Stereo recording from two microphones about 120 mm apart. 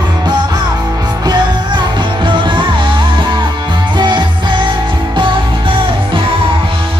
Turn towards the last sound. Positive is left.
turn(degrees=-45)  # may be behind; listen again after turning